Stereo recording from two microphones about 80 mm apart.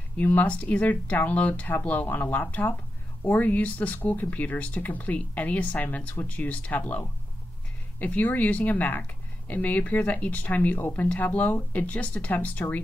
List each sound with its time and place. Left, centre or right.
0.2 s speech: left